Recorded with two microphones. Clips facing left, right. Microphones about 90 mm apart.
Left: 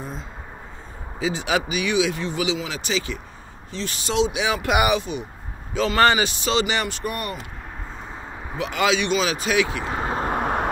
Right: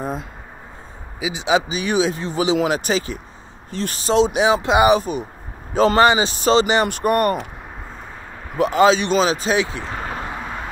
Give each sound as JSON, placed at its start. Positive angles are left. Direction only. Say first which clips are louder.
{"t": 0.0, "sound": "a sound", "louder": "right 8 dB", "side_deg": -55}
{"t": 1.2, "sound": "speech", "louder": "right 4 dB", "side_deg": -20}
{"t": 1.7, "sound": "speech", "louder": "right 2 dB", "side_deg": -35}
{"t": 4.6, "sound": "speech", "louder": "right 3 dB", "side_deg": -25}
{"t": 5.9, "sound": "speech", "louder": "right 1 dB", "side_deg": -20}
{"t": 6.2, "sound": "speech", "louder": "right 6 dB", "side_deg": -40}
{"t": 6.9, "sound": "speech", "louder": "right 11 dB", "side_deg": -50}
{"t": 8.5, "sound": "speech", "louder": "right 7 dB", "side_deg": -35}
{"t": 9.9, "sound": "vehicle", "louder": "left 3 dB", "side_deg": 25}
{"t": 10.2, "sound": "vehicle", "louder": "left 6 dB", "side_deg": 50}